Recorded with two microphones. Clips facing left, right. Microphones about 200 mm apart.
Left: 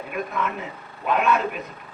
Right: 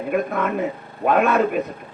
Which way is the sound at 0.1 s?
50° right (ahead or behind).